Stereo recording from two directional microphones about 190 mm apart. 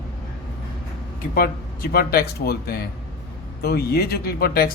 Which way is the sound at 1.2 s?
50° left (ahead or behind).